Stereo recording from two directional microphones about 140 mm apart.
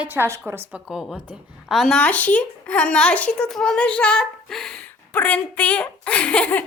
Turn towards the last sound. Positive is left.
turn(degrees=10)  # may be behind; listen again after turning